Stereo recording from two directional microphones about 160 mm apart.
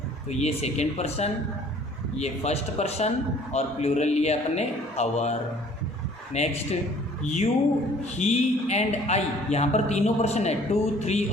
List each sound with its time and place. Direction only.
0.3 s a man's voice: 45° left (ahead or behind)
10.7 s music: 40° left (ahead or behind)
11.0 s a man's voice: 45° left (ahead or behind)